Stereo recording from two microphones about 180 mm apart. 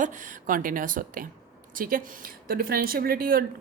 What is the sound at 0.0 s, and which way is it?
A woman's voice, 45° right (ahead or behind).